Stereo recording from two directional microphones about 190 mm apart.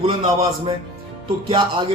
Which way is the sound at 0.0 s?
30° right (ahead or behind).